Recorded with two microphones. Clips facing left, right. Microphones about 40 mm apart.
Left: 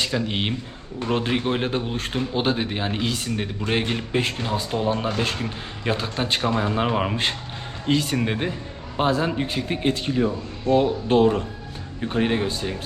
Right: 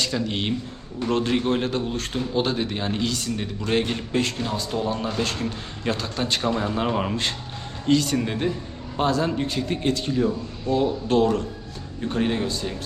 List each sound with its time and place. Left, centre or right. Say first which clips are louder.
0.0 s a man's voice: left 1 dB; centre